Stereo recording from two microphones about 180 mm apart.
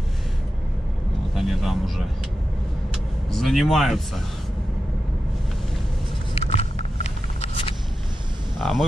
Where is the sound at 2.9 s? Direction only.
Centre (ahead or behind).